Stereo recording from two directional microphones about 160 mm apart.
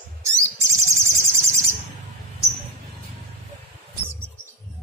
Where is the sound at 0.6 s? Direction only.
15° right (ahead or behind).